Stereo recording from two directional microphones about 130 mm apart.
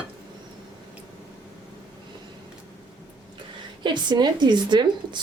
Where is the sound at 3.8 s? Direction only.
35° right (ahead or behind).